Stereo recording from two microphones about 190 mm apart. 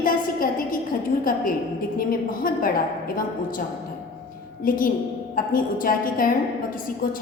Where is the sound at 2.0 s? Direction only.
50° left (ahead or behind).